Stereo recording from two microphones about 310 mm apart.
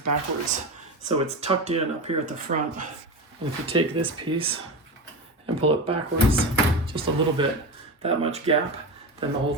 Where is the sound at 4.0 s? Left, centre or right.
Centre.